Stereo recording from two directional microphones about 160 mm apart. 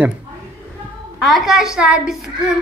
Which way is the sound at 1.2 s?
Centre (ahead or behind).